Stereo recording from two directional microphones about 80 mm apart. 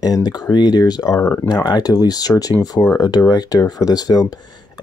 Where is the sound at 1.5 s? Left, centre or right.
Left.